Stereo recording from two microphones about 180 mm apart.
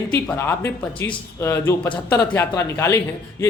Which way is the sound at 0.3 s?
15° left (ahead or behind).